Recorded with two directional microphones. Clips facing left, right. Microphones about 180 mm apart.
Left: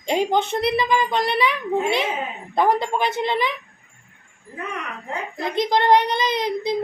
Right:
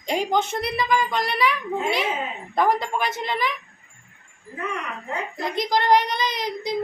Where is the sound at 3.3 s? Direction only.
25° left (ahead or behind).